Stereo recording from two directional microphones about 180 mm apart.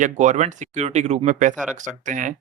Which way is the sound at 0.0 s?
40° right (ahead or behind).